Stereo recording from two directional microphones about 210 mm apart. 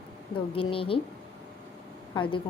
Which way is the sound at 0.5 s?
25° left (ahead or behind).